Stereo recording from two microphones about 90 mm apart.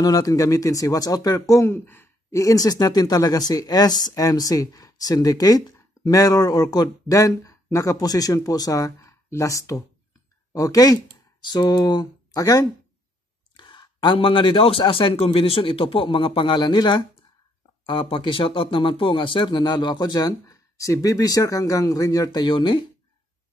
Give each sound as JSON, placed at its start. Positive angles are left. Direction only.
{"t": 0.0, "sound": "speech", "side_deg": 40}
{"t": 2.4, "sound": "speech", "side_deg": 45}
{"t": 13.6, "sound": "speech", "side_deg": 65}
{"t": 17.8, "sound": "speech", "side_deg": 70}